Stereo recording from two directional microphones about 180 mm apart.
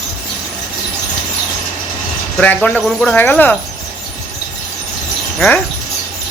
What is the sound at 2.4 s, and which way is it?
Speech, 10° left (ahead or behind).